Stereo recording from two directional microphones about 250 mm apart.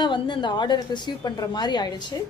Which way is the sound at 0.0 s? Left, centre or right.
Centre.